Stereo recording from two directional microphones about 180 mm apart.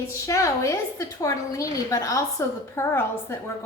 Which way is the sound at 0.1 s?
15° left (ahead or behind).